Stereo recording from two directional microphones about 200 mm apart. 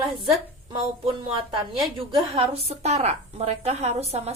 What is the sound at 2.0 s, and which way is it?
A woman's voice, 25° right (ahead or behind).